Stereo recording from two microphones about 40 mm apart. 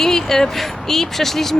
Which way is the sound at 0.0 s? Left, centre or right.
Centre.